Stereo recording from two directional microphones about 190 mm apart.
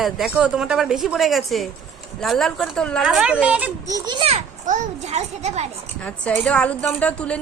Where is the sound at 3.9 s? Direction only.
25° right (ahead or behind).